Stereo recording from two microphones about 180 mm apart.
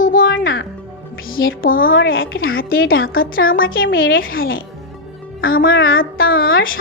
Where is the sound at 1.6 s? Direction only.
50° left (ahead or behind).